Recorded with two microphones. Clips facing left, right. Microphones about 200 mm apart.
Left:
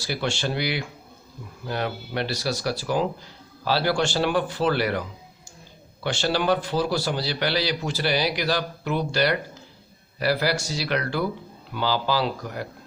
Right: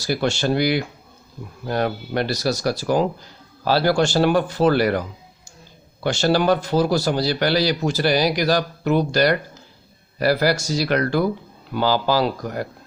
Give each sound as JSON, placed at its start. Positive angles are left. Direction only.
{"t": 0.0, "sound": "a man's voice", "side_deg": -45}